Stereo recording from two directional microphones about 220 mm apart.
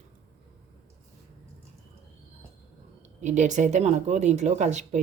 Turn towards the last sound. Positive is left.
turn(degrees=-35)  # may be behind; listen again after turning